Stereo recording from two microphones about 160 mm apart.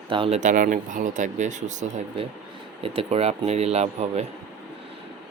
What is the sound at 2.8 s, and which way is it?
Speech, 35° right (ahead or behind).